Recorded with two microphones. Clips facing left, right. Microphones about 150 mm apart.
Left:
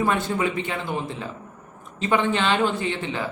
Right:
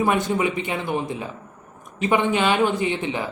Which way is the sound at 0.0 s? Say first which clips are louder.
Right 2 dB; 15° right (ahead or behind).